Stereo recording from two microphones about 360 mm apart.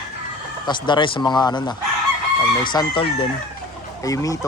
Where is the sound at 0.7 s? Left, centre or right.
Centre.